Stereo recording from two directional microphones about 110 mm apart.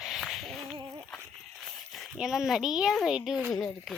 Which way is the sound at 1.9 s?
Centre (ahead or behind).